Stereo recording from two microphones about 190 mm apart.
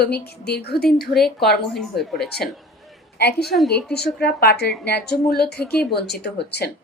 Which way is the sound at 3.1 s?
60° left (ahead or behind).